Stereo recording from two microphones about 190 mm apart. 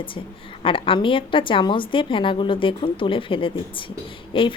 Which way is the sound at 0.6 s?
25° left (ahead or behind).